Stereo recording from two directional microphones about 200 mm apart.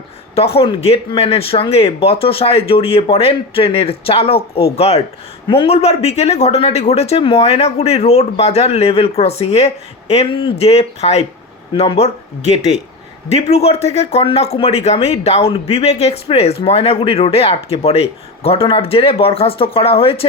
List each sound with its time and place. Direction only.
0.3 s speech: 30° left (ahead or behind)